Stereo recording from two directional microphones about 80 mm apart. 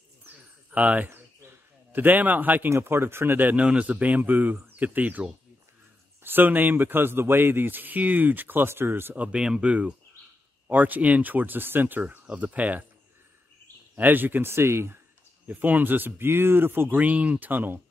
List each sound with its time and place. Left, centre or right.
0.7 s a sound: centre
2.7 s a man's voice: right
6.2 s a man's voice: right
9.1 s a man's voice: centre
13.9 s a man's voice: right
15.4 s a man's voice: right